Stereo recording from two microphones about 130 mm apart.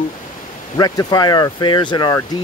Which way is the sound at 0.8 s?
30° left (ahead or behind).